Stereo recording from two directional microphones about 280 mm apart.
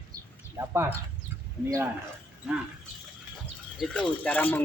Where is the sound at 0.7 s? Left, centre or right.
Centre.